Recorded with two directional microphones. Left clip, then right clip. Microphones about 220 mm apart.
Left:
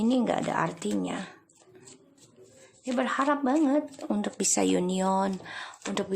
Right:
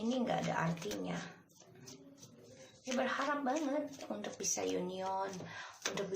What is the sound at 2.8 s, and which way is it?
Speech, 50° left (ahead or behind).